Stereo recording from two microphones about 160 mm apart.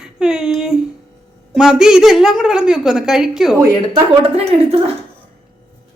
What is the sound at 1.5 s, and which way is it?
A woman's voice, 5° right (ahead or behind).